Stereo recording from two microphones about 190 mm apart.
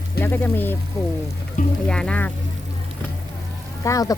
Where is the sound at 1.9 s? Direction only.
5° left (ahead or behind).